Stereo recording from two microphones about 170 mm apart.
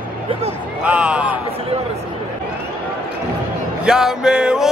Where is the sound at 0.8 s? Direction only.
5° right (ahead or behind).